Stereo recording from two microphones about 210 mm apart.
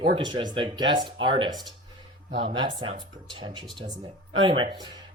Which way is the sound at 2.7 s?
35° right (ahead or behind).